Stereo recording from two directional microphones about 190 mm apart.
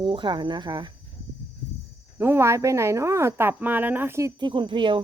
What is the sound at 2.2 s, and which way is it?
Speech, 15° right (ahead or behind).